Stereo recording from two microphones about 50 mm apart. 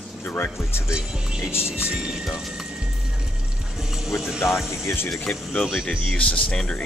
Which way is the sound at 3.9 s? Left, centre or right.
Centre.